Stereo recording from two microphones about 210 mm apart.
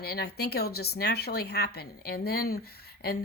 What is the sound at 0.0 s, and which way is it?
Speech, 50° left (ahead or behind).